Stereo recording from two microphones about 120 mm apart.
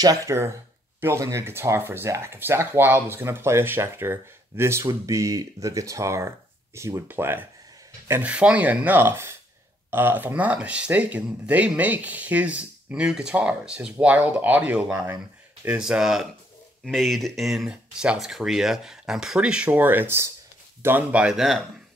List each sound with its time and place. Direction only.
0.0 s speech: 30° right (ahead or behind); by 21.6 s centre (ahead or behind)